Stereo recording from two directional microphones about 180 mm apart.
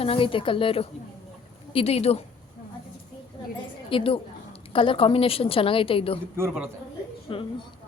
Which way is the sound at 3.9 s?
30° left (ahead or behind).